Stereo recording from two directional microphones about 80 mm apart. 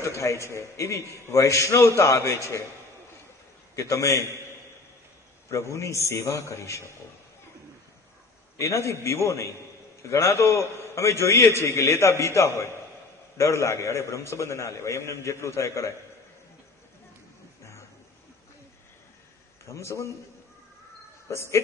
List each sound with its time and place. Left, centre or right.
0.0 s a man's voice: left
3.7 s a man's voice: left
5.5 s a man's voice: left
8.5 s a man's voice: left
19.6 s a man's voice: left
21.3 s a man's voice: left